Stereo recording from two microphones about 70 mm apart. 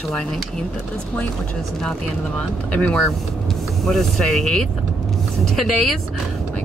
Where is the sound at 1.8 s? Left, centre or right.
Centre.